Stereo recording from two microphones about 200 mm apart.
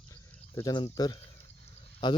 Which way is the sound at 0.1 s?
15° left (ahead or behind).